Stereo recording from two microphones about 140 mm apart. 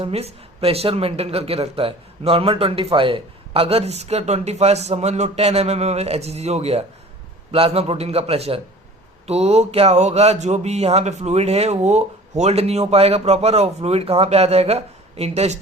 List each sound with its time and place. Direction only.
0.0 s speech: 45° right (ahead or behind)